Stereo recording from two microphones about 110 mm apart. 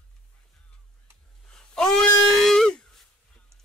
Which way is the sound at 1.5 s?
5° left (ahead or behind).